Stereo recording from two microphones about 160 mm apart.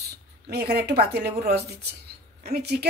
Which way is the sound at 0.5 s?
85° right.